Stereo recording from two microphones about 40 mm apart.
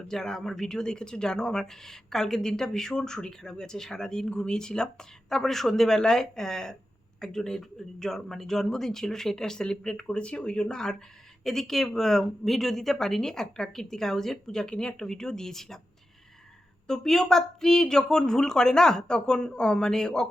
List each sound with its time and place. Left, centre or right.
0.1 s speech: centre
10.2 s speech: left; by 15.8 s centre
16.8 s speech: centre